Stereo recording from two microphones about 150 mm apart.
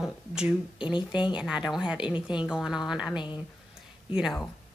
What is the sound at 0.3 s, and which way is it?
Speech, 5° right (ahead or behind).